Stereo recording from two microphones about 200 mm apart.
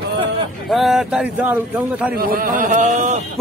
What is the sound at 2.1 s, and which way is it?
Speech, 50° right (ahead or behind).